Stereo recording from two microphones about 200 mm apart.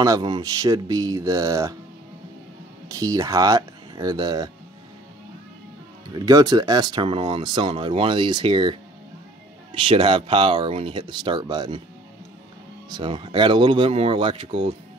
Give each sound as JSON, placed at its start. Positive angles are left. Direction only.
{"t": 0.0, "sound": "speech", "side_deg": -20}
{"t": 2.9, "sound": "speech", "side_deg": -15}
{"t": 6.1, "sound": "speech", "side_deg": -20}
{"t": 9.8, "sound": "speech", "side_deg": -25}
{"t": 12.9, "sound": "speech", "side_deg": -25}